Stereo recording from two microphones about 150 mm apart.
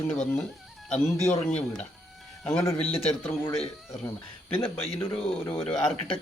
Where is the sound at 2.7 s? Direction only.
40° left (ahead or behind).